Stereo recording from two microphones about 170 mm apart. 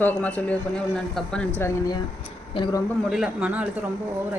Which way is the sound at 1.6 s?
20° left (ahead or behind).